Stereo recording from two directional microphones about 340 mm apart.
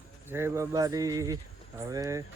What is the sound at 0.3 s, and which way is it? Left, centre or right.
Speech, centre.